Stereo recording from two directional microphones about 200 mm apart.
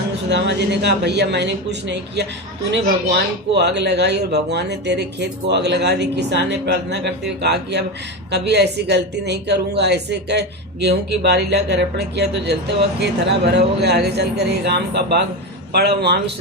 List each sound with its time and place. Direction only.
0.3 s a woman's voice: 60° right (ahead or behind)